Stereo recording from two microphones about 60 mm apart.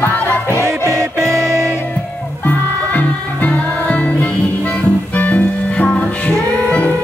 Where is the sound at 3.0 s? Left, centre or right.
Left.